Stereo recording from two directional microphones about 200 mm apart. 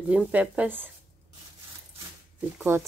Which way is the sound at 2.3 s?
10° right (ahead or behind).